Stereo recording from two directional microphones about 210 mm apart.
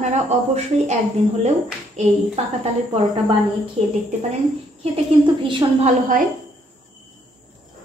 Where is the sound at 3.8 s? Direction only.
30° right (ahead or behind).